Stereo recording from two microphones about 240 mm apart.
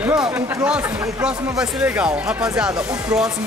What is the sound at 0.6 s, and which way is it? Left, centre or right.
Speech, centre.